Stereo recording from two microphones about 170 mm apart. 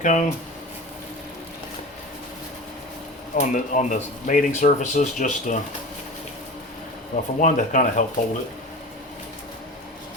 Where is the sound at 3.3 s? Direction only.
45° left (ahead or behind).